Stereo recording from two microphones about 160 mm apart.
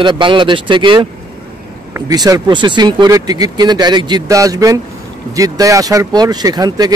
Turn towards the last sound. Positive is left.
turn(degrees=-25)  # may be behind; listen again after turning